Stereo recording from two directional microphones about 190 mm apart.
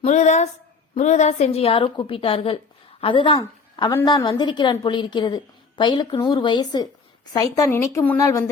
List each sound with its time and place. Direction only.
0.0 s a woman's voice: 40° left (ahead or behind); by 8.4 s 15° left (ahead or behind)